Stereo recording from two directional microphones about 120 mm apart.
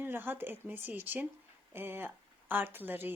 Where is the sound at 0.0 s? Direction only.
15° right (ahead or behind).